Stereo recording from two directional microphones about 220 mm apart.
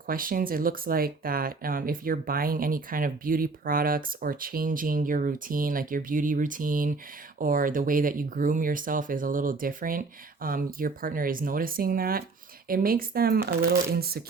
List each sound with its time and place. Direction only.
0.1 s speech: 40° right (ahead or behind)